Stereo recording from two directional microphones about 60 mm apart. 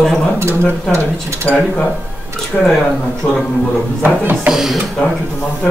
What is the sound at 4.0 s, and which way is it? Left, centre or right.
Speech, right.